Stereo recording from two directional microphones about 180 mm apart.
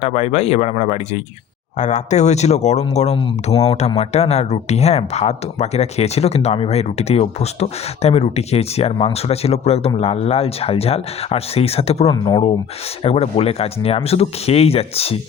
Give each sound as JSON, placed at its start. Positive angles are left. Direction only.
{"t": 0.0, "sound": "speech", "side_deg": 35}